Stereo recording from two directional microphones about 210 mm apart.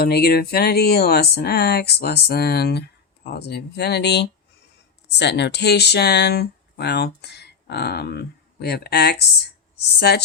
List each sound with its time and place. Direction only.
0.0 s speech: 50° left (ahead or behind)